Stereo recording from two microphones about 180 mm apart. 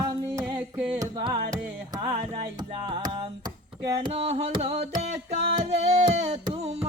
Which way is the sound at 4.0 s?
35° right (ahead or behind).